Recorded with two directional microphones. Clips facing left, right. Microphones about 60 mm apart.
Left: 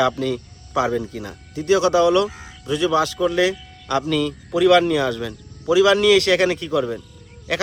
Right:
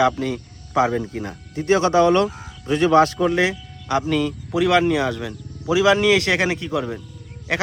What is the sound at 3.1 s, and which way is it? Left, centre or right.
Speech, right.